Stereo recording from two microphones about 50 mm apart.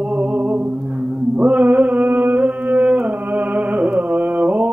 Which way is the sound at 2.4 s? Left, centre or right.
Centre.